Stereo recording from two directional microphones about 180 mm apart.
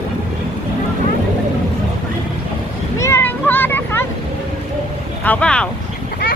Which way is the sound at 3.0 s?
15° left (ahead or behind).